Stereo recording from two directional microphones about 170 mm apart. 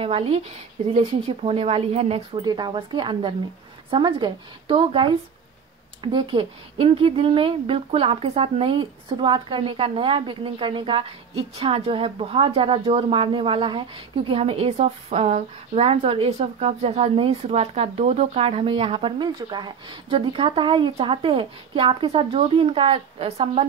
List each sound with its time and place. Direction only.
0.0 s speech: 35° right (ahead or behind)
6.1 s speech: 30° right (ahead or behind)